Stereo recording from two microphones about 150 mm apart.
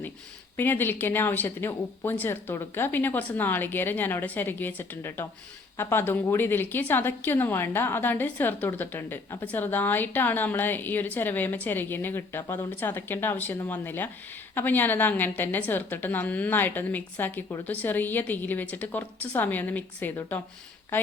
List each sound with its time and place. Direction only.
0.5 s a woman's voice: 15° left (ahead or behind)